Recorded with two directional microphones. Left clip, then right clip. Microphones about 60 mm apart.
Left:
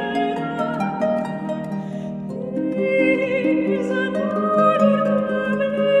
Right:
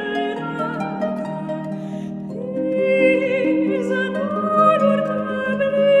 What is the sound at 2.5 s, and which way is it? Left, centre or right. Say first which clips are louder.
Music: right 2 dB; right.